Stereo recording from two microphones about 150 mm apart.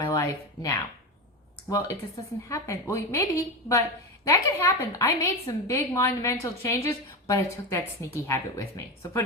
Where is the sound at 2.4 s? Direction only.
20° left (ahead or behind).